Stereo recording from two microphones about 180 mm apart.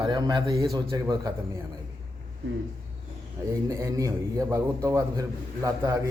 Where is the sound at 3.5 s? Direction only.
15° right (ahead or behind).